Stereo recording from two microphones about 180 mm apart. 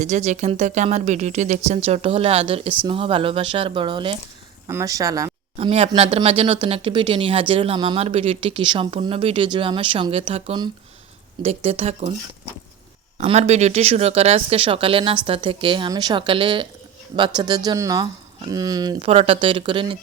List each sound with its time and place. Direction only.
0.0 s speech: 40° right (ahead or behind)
4.7 s speech: 15° right (ahead or behind)
5.5 s speech: 35° right (ahead or behind)
13.1 s speech: 35° right (ahead or behind)